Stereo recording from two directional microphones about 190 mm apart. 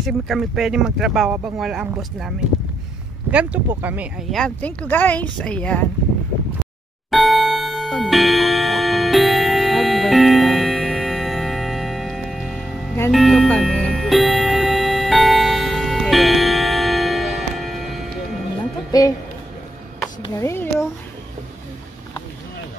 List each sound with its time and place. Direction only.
0.0 s speech: centre (ahead or behind)
7.1 s music: centre (ahead or behind)
18.9 s speech: 20° left (ahead or behind)
20.3 s a child's voice: 15° left (ahead or behind)